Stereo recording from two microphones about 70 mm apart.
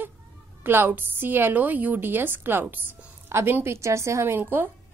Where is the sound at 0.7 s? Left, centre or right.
Right.